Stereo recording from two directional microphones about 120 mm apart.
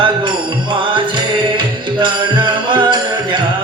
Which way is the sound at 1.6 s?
40° right (ahead or behind).